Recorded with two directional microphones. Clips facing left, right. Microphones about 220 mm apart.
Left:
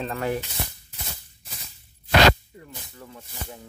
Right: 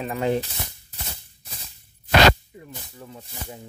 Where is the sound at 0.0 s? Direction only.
15° right (ahead or behind).